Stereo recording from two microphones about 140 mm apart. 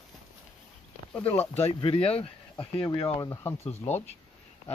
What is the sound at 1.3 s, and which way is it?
Speech, 45° left (ahead or behind).